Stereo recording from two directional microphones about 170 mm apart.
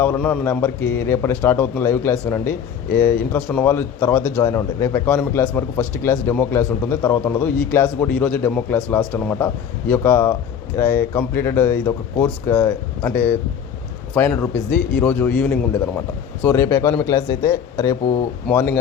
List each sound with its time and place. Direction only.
0.0 s a man's voice: 10° left (ahead or behind)